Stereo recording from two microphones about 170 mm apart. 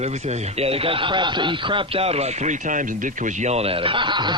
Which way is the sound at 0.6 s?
35° right (ahead or behind).